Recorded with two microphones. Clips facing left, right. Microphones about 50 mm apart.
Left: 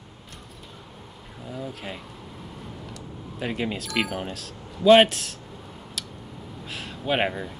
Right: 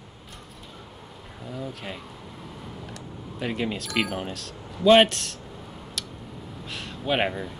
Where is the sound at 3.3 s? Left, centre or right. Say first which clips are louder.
Even; centre.